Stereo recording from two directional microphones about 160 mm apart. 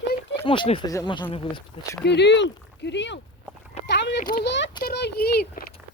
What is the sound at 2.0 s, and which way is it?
Speech, 90° left.